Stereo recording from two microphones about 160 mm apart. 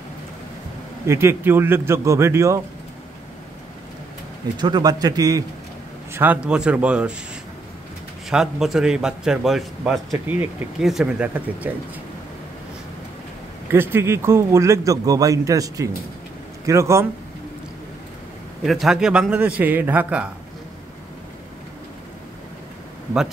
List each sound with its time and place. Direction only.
1.0 s a man's voice: 15° right (ahead or behind)
4.6 s a man's voice: 25° right (ahead or behind)
6.1 s a man's voice: 10° right (ahead or behind)
8.3 s a man's voice: 5° right (ahead or behind)
10.1 s a man's voice: 10° right (ahead or behind)
13.7 s a man's voice: 15° right (ahead or behind)
18.6 s a man's voice: centre (ahead or behind)